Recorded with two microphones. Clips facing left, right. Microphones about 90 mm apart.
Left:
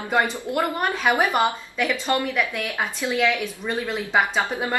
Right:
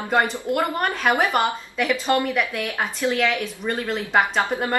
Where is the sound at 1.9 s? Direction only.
15° right (ahead or behind).